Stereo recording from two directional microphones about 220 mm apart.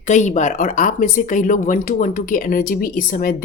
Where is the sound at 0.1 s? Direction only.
35° left (ahead or behind).